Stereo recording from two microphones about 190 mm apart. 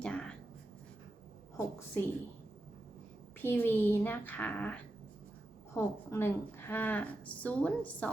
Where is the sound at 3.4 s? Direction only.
10° left (ahead or behind).